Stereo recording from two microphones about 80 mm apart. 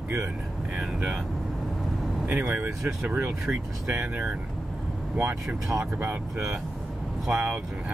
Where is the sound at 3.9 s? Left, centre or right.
Centre.